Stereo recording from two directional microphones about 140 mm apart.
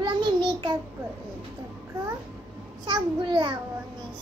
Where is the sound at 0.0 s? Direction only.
35° right (ahead or behind).